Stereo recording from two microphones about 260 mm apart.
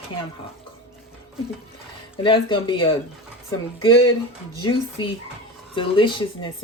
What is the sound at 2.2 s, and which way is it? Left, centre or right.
Speech, centre.